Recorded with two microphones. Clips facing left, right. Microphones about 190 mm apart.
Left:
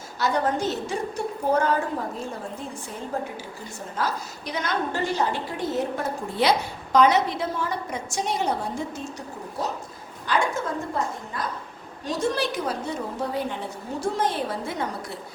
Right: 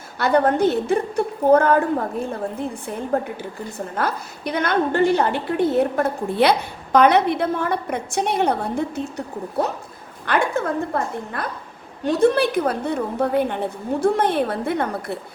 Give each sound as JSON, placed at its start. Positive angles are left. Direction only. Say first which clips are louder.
{"t": 0.2, "sound": "a woman's voice", "louder": "right 7 dB", "side_deg": -60}